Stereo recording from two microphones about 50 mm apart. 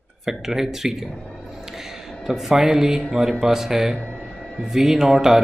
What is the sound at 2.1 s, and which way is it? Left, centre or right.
Speech, centre.